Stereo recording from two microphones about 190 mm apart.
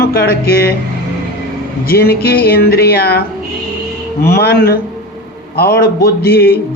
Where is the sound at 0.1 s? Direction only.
55° left (ahead or behind).